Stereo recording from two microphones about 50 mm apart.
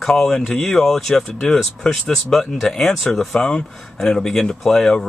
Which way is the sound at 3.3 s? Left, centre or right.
Centre.